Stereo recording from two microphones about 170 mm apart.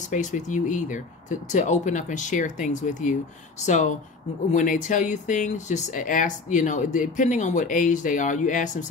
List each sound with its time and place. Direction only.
0.1 s speech: 50° left (ahead or behind)